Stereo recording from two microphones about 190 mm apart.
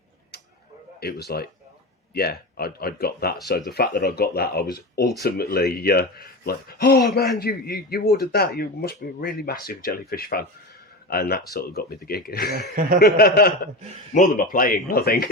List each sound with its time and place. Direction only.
0.9 s speech: 55° left (ahead or behind)
12.7 s speech: 50° right (ahead or behind)
13.0 s speech: 55° left (ahead or behind)